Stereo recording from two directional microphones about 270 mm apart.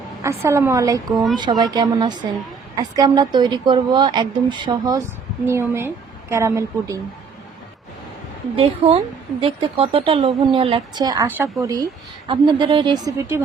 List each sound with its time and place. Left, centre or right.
0.2 s speech: centre
8.5 s speech: right